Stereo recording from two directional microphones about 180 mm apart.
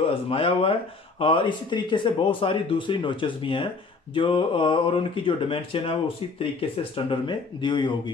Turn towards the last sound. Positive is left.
turn(degrees=25)  # may be behind; listen again after turning